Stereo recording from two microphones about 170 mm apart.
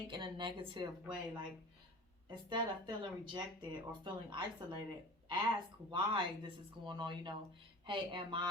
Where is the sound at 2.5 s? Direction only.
25° right (ahead or behind).